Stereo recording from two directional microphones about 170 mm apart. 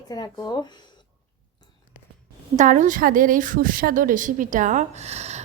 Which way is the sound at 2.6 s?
50° right (ahead or behind).